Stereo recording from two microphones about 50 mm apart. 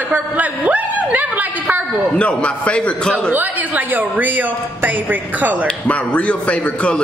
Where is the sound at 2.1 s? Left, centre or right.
Left.